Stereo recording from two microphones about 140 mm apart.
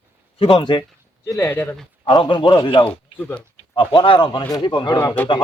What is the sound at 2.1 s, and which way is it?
Speech, 35° left (ahead or behind).